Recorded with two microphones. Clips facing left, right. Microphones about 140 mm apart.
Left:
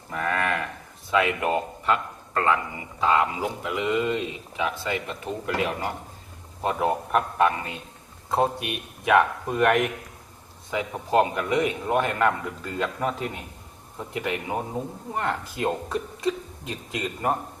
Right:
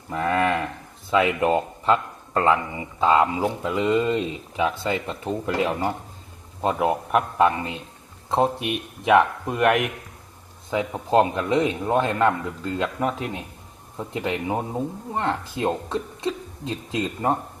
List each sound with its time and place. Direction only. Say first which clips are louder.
0.1 s a man's voice: right 4 dB; 25° right (ahead or behind)
6.8 s a man's voice: right 1 dB; 5° right (ahead or behind)
7.4 s speech: right 2 dB; 25° right (ahead or behind)
9.5 s speech: left 1 dB; 5° right (ahead or behind)
10.7 s speech: right 3 dB; 25° right (ahead or behind)
12.8 s a man's voice: right 1 dB; 5° right (ahead or behind)
14.1 s speech: right 3 dB; 25° right (ahead or behind)